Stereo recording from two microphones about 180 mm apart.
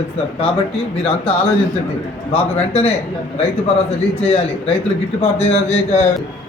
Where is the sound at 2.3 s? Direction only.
35° left (ahead or behind).